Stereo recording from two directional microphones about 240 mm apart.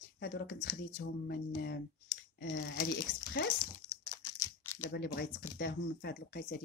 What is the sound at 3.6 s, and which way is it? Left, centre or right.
Crumpling, centre.